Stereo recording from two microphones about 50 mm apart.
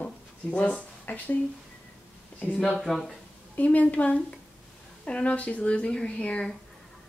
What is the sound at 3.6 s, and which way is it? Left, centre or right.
Speech, left.